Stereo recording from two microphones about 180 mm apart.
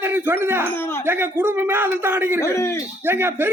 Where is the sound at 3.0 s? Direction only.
10° right (ahead or behind).